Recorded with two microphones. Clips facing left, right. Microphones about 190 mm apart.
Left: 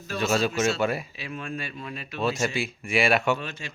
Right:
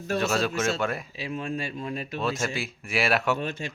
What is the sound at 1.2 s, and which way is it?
Speech, 30° right (ahead or behind).